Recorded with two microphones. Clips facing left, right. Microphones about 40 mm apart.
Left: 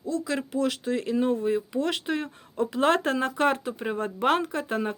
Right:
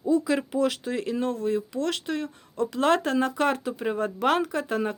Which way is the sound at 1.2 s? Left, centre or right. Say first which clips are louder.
Left 2 dB; centre.